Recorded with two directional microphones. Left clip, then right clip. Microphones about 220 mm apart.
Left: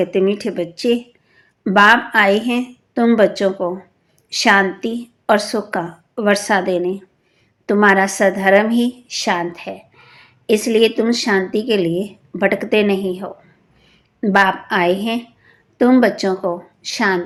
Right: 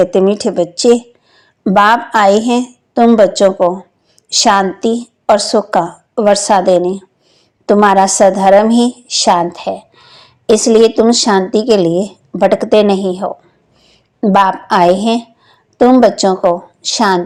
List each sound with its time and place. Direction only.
0.3 s a woman's voice: 25° right (ahead or behind)